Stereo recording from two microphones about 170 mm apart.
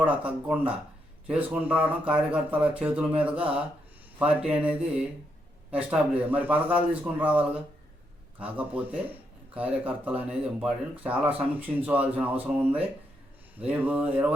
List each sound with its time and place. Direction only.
0.0 s speech: 10° right (ahead or behind)
5.7 s speech: 10° right (ahead or behind)